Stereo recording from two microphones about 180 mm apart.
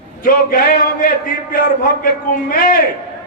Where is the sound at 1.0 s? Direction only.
55° left (ahead or behind).